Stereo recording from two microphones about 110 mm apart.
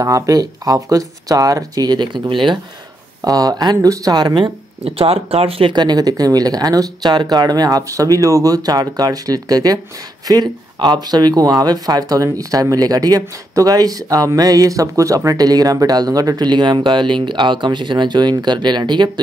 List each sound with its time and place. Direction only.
0.0 s speech: 30° right (ahead or behind); by 2.6 s 45° right (ahead or behind)
3.3 s speech: 35° right (ahead or behind)
4.8 s speech: 60° right (ahead or behind); by 19.0 s 45° right (ahead or behind)